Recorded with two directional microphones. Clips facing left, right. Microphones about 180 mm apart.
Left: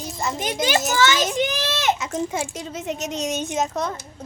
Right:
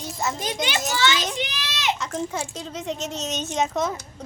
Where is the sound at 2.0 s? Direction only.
10° left (ahead or behind).